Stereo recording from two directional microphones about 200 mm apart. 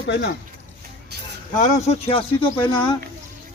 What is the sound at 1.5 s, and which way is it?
Speech, 35° left (ahead or behind).